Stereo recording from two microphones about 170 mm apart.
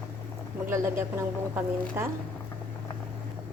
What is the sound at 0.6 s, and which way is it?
Speech, 15° right (ahead or behind).